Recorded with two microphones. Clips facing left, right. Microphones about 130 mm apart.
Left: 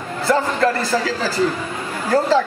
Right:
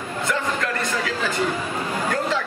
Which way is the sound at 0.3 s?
35° left (ahead or behind).